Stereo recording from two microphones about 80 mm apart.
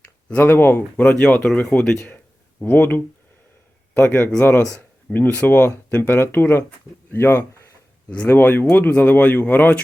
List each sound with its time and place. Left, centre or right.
0.3 s speech: left
1.2 s speech: centre
2.1 s a sound: centre
3.9 s speech: left